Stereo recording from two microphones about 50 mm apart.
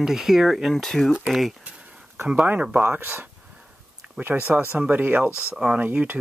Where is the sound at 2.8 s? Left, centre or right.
Right.